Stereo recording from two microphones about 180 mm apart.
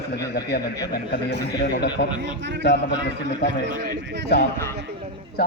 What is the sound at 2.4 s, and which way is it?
Speech, 80° right.